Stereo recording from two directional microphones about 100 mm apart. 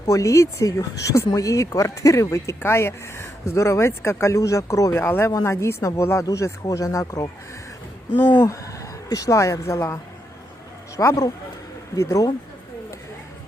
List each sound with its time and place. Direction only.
0.0 s speech: 35° left (ahead or behind)
5.0 s speech: 20° left (ahead or behind)
8.4 s speech: 35° left (ahead or behind)